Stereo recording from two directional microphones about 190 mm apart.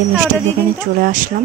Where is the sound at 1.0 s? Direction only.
45° right (ahead or behind).